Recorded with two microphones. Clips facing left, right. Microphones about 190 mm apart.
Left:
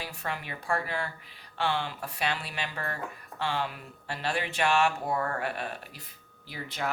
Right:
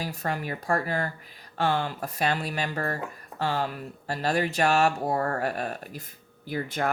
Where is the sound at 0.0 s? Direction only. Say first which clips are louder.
Right 6 dB; 40° right (ahead or behind).